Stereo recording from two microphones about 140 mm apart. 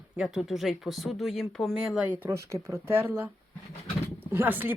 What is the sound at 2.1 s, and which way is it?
Speech, 15° right (ahead or behind).